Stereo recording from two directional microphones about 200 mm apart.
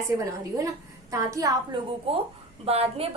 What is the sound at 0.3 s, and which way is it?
A woman's voice, 15° right (ahead or behind).